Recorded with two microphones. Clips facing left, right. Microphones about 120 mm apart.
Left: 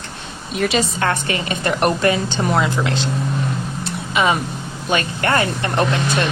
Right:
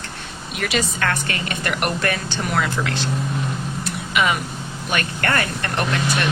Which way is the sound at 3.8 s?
25° left (ahead or behind).